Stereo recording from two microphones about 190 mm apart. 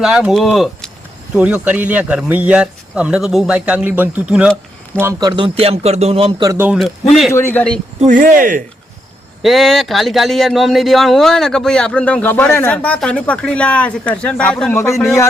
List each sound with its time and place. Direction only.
0.0 s speech: 5° right (ahead or behind)
5.3 s speech: 30° right (ahead or behind)
6.5 s speech: 10° right (ahead or behind)
6.7 s speech: centre (ahead or behind)
7.3 s a man's voice: 10° left (ahead or behind)
7.9 s speech: 40° right (ahead or behind)
9.4 s speech: centre (ahead or behind)